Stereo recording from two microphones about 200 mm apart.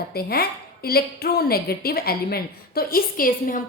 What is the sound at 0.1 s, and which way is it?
A woman's voice, 50° left (ahead or behind).